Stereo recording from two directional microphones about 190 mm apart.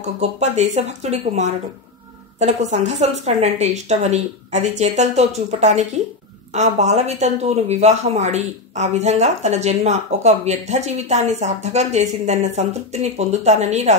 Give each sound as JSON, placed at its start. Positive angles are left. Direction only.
{"t": 0.0, "sound": "speech", "side_deg": -35}